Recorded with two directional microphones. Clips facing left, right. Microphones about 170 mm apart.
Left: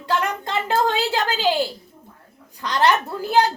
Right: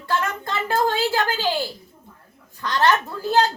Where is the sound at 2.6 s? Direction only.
15° left (ahead or behind).